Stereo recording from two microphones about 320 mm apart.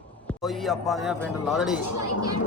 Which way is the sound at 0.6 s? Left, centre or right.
Centre.